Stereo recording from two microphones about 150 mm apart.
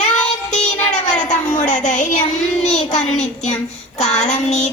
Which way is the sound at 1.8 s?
50° left (ahead or behind).